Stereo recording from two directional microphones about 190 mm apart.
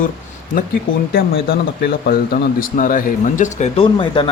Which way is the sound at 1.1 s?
50° left (ahead or behind).